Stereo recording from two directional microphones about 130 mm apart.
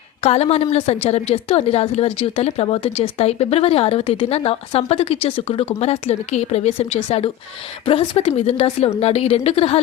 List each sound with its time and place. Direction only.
0.2 s a woman's voice: 55° left (ahead or behind)